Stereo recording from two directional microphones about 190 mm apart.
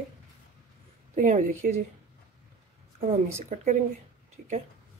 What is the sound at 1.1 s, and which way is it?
Speech, 40° right (ahead or behind).